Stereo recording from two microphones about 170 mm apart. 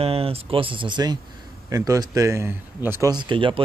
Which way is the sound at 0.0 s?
35° right (ahead or behind).